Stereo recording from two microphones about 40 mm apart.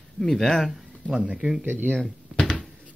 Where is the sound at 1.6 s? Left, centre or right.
Right.